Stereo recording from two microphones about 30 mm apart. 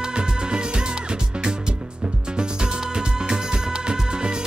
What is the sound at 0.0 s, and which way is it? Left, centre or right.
Music, right.